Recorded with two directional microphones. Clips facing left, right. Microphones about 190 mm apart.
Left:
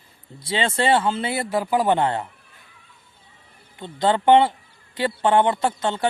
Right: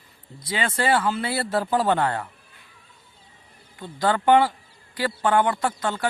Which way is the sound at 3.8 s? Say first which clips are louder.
Left 2 dB; 25° left (ahead or behind).